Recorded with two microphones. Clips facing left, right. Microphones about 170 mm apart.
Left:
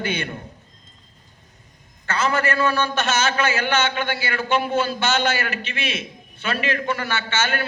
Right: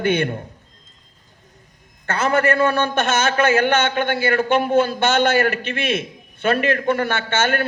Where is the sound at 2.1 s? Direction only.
55° right (ahead or behind).